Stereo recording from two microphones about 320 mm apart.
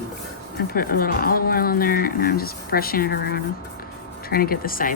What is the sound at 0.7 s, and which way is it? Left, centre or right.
Speech, left.